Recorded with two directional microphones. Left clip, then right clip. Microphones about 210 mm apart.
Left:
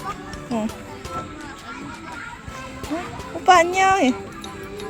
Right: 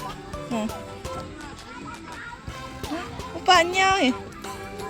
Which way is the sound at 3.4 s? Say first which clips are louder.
Left 4 dB; 5° left (ahead or behind).